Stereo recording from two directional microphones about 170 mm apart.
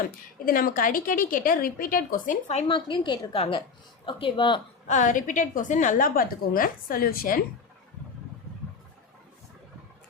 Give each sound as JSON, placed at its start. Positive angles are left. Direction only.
{"t": 0.0, "sound": "a woman's voice", "side_deg": 55}
{"t": 4.9, "sound": "a woman's voice", "side_deg": 45}